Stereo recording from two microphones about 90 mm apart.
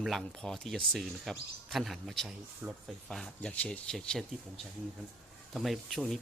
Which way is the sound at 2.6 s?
20° right (ahead or behind).